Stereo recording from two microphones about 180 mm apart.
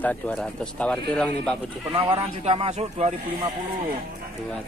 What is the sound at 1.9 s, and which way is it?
Speech, 25° right (ahead or behind).